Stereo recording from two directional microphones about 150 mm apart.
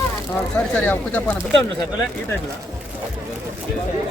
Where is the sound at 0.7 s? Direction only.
10° left (ahead or behind).